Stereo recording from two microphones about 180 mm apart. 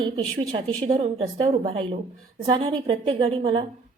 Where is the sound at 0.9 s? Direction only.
35° right (ahead or behind).